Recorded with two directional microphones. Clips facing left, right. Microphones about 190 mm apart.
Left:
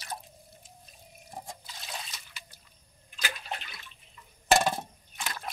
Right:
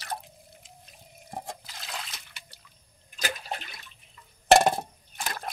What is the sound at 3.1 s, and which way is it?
Bathtub, 40° right (ahead or behind).